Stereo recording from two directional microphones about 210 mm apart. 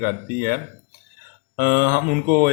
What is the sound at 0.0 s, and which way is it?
Speech, 45° right (ahead or behind).